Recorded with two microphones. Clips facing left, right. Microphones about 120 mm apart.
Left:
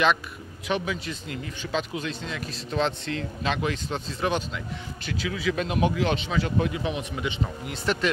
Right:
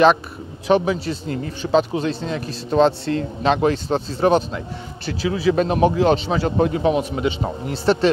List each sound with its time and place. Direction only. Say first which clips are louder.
0.7 s speech: right 10 dB; 30° right (ahead or behind)